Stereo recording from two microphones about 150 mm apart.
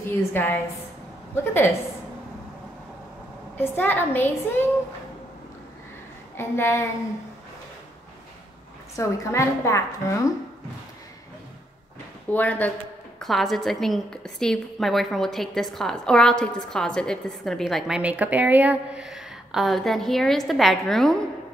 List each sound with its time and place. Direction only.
0.3 s a woman's voice: 15° left (ahead or behind)
3.5 s a woman's voice: 15° left (ahead or behind)
6.3 s a woman's voice: 15° left (ahead or behind)
8.9 s a woman's voice: 20° left (ahead or behind)
12.3 s a woman's voice: 10° left (ahead or behind)